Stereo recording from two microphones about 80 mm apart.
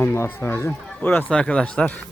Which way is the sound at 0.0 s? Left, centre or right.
Left.